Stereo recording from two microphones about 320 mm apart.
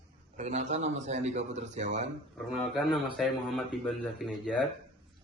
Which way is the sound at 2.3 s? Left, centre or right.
Centre.